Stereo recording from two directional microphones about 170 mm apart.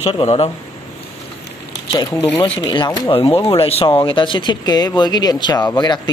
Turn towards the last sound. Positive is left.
turn(degrees=20)  # may be behind; listen again after turning